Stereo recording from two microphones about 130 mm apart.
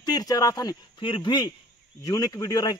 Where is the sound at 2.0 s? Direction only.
25° left (ahead or behind).